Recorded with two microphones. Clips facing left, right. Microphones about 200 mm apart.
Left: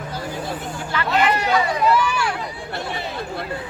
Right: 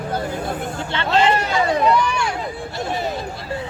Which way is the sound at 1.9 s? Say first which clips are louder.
Right 1 dB; 5° left (ahead or behind).